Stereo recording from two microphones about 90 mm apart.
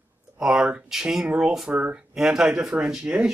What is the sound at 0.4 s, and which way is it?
Speech, 10° right (ahead or behind).